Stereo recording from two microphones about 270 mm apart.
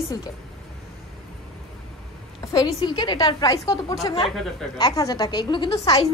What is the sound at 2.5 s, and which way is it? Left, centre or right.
A woman's voice, centre.